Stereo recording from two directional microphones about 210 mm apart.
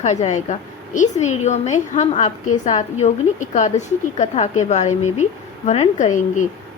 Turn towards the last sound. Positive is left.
turn(degrees=35)  # may be behind; listen again after turning